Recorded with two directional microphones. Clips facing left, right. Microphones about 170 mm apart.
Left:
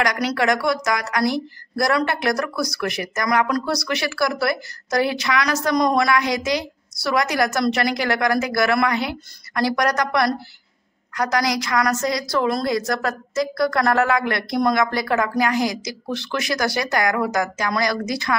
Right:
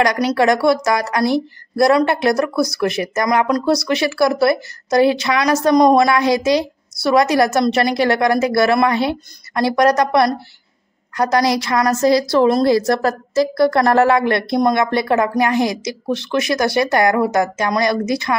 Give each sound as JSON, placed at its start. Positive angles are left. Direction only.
{"t": 0.0, "sound": "speech", "side_deg": -25}